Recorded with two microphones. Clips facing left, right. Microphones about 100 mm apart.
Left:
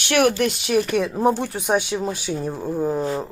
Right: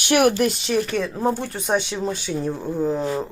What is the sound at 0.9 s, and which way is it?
Speech, 15° left (ahead or behind).